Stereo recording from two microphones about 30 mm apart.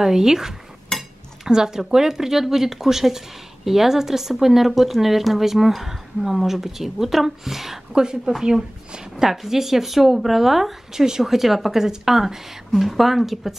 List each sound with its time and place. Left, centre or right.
0.0 s speech: centre
0.9 s cutlery: centre
1.4 s speech: centre
7.9 s a woman's voice: right